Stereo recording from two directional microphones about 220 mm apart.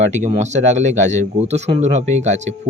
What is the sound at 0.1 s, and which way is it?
A man's voice, 30° right (ahead or behind).